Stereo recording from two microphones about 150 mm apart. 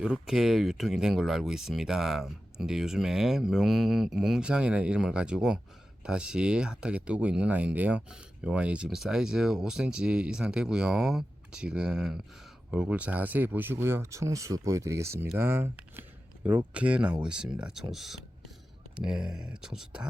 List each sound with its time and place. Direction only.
0.0 s speech: 5° right (ahead or behind)
17.9 s a sound: centre (ahead or behind)
18.9 s speech: 5° right (ahead or behind)